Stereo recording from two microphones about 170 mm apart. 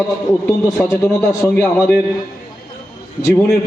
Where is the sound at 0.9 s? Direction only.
15° left (ahead or behind).